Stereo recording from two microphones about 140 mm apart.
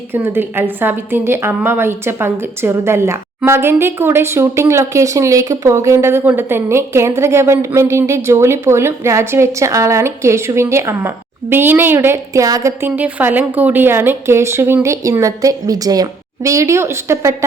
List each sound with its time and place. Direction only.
0.1 s a woman's voice: 15° right (ahead or behind)